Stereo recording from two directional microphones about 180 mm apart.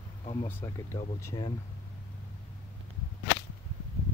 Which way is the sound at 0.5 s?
10° left (ahead or behind).